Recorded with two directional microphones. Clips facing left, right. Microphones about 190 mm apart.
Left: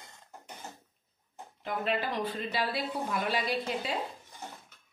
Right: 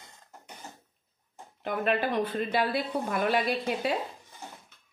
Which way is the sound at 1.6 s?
60° right (ahead or behind).